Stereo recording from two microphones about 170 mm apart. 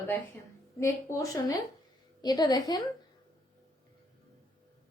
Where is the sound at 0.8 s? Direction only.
15° left (ahead or behind).